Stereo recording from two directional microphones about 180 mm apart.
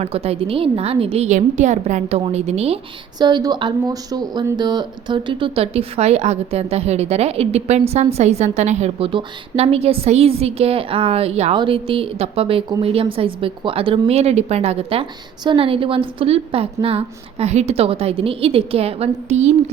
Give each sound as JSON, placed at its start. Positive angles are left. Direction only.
{"t": 0.0, "sound": "speech", "side_deg": -35}
{"t": 3.2, "sound": "speech", "side_deg": -25}